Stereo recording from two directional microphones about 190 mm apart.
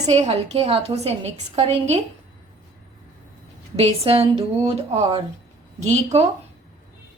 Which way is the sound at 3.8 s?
30° right (ahead or behind).